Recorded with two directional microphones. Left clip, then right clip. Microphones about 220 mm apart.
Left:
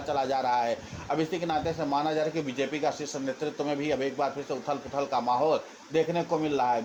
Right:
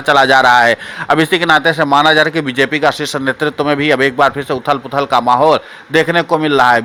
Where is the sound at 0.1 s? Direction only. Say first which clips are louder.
Right 19 dB; 35° right (ahead or behind).